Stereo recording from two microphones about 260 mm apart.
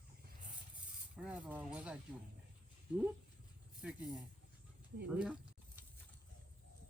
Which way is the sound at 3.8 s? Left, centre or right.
Centre.